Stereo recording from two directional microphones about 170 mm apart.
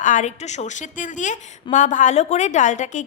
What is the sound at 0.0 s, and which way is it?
A woman's voice, 45° left (ahead or behind).